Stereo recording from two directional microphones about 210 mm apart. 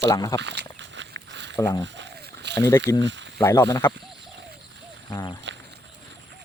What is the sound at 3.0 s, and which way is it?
Speech, 60° right (ahead or behind).